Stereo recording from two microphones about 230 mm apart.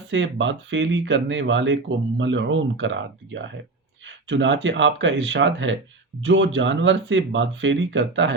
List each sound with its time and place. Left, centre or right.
0.1 s speech: right